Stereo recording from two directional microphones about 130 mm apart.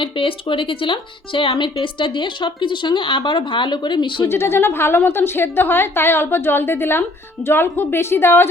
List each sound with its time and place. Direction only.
0.0 s speech: 40° left (ahead or behind)
4.3 s a woman's voice: 20° left (ahead or behind)